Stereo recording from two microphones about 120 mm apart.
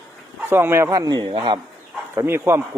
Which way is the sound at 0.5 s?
20° right (ahead or behind).